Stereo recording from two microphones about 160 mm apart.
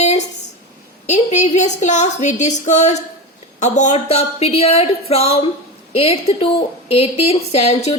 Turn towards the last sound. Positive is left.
turn(degrees=40)  # may be behind; listen again after turning